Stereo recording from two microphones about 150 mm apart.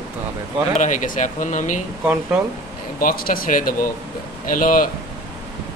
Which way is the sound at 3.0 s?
70° left (ahead or behind).